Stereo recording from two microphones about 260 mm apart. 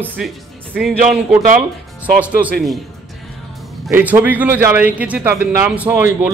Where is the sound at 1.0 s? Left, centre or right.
Right.